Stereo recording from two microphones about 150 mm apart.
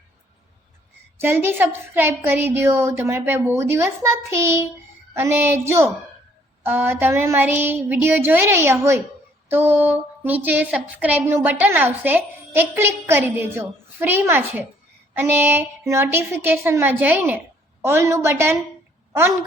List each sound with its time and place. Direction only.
1.2 s a woman's voice: 15° right (ahead or behind)